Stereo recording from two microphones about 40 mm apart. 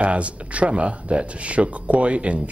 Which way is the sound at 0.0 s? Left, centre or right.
Right.